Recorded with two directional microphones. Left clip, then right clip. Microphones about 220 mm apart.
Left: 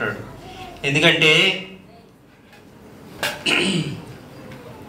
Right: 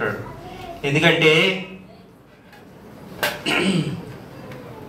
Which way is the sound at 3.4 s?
40° left (ahead or behind).